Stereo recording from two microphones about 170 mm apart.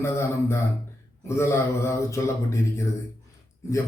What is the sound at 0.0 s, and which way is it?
Mantra, 15° left (ahead or behind).